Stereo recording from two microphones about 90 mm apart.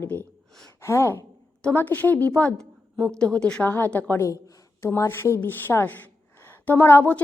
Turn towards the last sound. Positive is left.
turn(degrees=20)  # may be behind; listen again after turning